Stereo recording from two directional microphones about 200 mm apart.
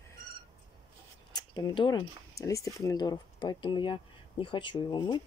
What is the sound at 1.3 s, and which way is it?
Speech, 20° left (ahead or behind).